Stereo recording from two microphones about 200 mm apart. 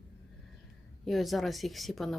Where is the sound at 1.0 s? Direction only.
Centre (ahead or behind).